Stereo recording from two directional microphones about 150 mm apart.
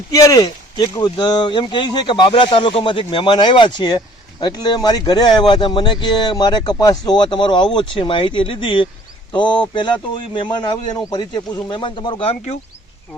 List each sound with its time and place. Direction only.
0.1 s speech: 20° left (ahead or behind); by 12.5 s 40° left (ahead or behind)